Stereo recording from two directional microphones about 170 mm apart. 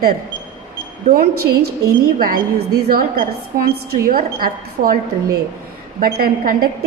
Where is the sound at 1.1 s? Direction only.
65° right (ahead or behind).